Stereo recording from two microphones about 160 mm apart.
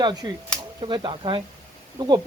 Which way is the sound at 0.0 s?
25° right (ahead or behind).